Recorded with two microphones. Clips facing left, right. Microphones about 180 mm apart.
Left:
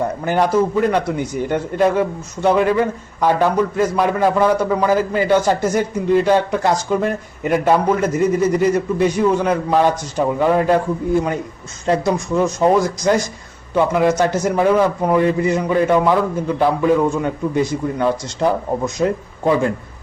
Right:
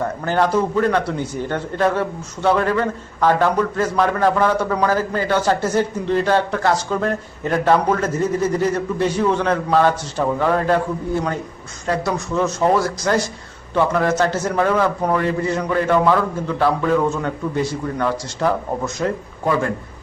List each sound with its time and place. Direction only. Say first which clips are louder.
0.0 s a man's voice: left 1 dB; 15° left (ahead or behind)
11.9 s a man's voice: left 4 dB; 15° left (ahead or behind)